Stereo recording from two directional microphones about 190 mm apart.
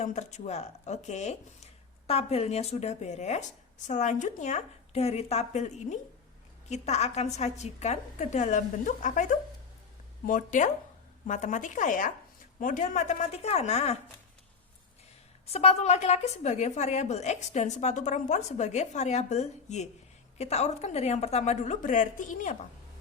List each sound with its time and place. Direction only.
0.0 s a woman's voice: 35° left (ahead or behind)
15.4 s a woman's voice: 35° left (ahead or behind)